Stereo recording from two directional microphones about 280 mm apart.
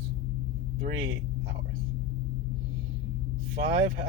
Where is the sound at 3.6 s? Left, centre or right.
Right.